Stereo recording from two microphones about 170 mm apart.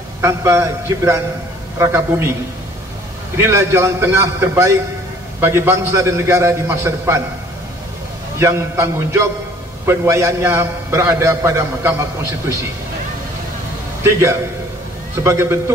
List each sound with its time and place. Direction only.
0.2 s a man's voice: 15° right (ahead or behind)
3.3 s a man's voice: 15° right (ahead or behind)
8.4 s a man's voice: 15° right (ahead or behind)
14.0 s a man's voice: 15° right (ahead or behind)